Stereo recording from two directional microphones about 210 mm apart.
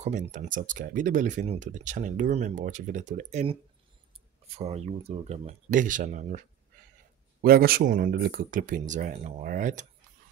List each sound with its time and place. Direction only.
0.0 s speech: 35° right (ahead or behind)
4.6 s speech: 30° right (ahead or behind)
7.4 s speech: 45° right (ahead or behind)